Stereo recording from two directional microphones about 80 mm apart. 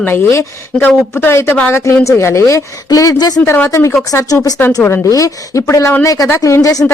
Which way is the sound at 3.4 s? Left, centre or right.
Left.